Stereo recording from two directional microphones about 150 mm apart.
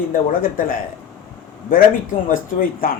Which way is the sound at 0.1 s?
70° left (ahead or behind).